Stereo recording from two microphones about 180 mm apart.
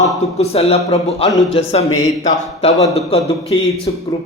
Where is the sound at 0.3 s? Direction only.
35° left (ahead or behind).